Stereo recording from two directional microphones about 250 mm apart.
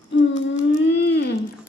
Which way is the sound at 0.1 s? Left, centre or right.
Left.